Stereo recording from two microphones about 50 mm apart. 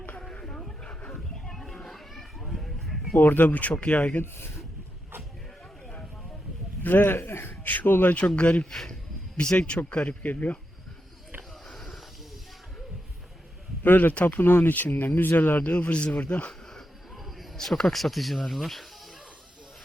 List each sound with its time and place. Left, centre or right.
1.5 s children playing: centre
3.2 s speech: left
4.2 s speech: left
6.8 s speech: left
7.6 s speech: left
8.4 s speech: left
8.7 s speech: centre
9.4 s speech: left
11.7 s a sound: centre
13.8 s speech: left
15.7 s speech: left
17.6 s speech: centre